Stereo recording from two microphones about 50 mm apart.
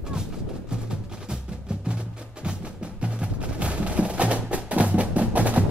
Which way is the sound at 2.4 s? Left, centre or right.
Right.